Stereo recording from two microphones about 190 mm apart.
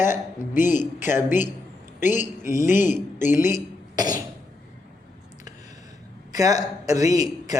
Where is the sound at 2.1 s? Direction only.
40° left (ahead or behind).